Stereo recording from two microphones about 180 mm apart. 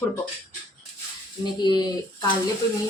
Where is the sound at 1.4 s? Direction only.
25° left (ahead or behind).